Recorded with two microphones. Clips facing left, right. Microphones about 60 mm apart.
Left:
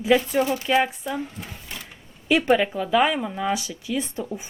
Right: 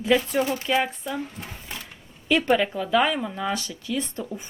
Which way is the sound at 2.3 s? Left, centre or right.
Centre.